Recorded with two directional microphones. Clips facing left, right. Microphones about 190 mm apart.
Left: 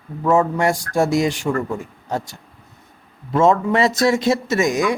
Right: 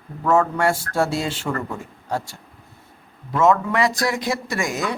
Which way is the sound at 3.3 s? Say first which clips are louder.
Left 2 dB; 25° left (ahead or behind).